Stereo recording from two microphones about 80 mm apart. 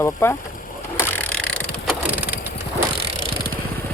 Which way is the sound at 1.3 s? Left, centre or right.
Centre.